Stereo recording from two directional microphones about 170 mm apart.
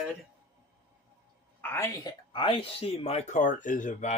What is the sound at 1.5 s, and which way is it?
Speech, 15° left (ahead or behind).